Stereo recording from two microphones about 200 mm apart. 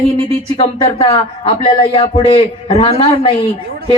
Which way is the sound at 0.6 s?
30° left (ahead or behind).